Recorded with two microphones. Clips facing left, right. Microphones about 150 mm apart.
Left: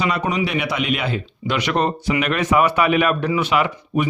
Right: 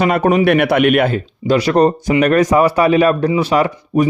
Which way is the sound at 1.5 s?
35° right (ahead or behind).